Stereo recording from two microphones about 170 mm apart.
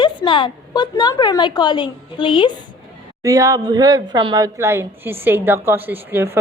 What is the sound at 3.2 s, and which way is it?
Speech, 20° right (ahead or behind).